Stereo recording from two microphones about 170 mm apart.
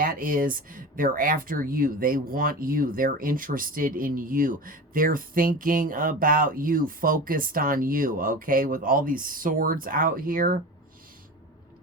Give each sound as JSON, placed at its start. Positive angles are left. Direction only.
{"t": 0.0, "sound": "speech", "side_deg": -55}